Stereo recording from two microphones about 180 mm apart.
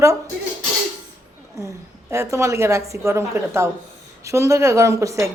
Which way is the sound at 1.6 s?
15° right (ahead or behind).